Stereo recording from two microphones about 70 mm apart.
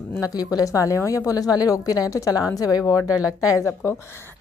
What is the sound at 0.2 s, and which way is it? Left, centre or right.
A woman's voice, left.